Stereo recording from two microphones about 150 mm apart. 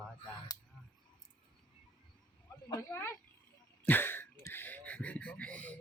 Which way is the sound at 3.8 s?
15° left (ahead or behind).